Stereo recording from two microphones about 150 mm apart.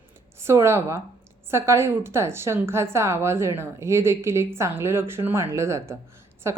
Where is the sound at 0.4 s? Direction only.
20° right (ahead or behind).